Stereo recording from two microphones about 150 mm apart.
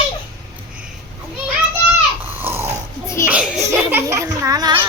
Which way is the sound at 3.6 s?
20° right (ahead or behind).